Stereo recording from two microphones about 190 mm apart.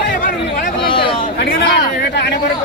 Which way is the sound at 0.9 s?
25° left (ahead or behind).